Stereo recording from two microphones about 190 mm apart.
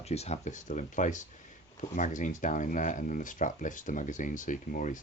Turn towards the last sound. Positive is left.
turn(degrees=45)  # may be behind; listen again after turning